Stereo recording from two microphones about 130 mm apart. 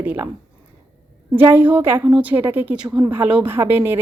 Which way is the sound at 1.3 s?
15° right (ahead or behind).